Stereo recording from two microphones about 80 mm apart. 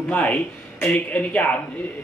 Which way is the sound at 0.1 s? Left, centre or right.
Centre.